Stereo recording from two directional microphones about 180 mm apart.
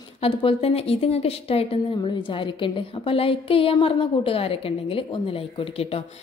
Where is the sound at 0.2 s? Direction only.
30° left (ahead or behind).